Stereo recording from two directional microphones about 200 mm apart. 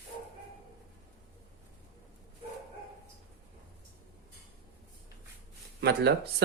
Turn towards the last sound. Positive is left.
turn(degrees=-55)  # may be behind; listen again after turning